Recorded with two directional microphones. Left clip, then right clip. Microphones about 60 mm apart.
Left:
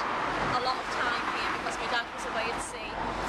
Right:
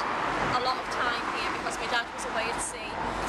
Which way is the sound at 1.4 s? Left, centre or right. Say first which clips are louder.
Even; left.